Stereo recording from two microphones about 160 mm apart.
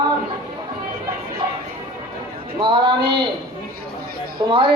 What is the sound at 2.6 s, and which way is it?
Speech, 30° right (ahead or behind).